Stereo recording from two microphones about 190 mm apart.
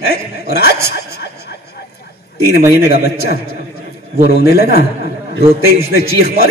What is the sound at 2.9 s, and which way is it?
Speech, 60° left (ahead or behind).